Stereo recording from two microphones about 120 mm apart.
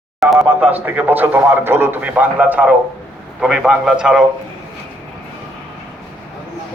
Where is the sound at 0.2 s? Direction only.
Centre (ahead or behind).